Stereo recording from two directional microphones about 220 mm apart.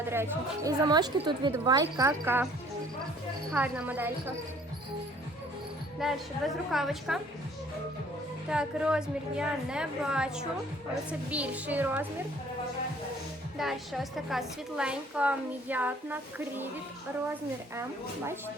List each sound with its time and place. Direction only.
0.0 s a woman's voice: 10° right (ahead or behind)
3.5 s a woman's voice: 5° right (ahead or behind)
6.0 s a woman's voice: centre (ahead or behind)
8.4 s a woman's voice: 5° right (ahead or behind)
13.6 s a woman's voice: centre (ahead or behind)
17.7 s a woman's voice: 10° right (ahead or behind)